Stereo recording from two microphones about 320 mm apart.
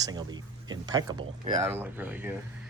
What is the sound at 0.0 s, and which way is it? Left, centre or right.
Speech, centre.